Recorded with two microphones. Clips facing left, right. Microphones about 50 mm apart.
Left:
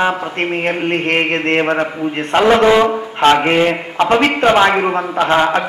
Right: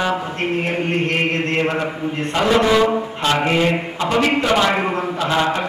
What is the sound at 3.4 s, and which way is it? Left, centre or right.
A man's voice, left.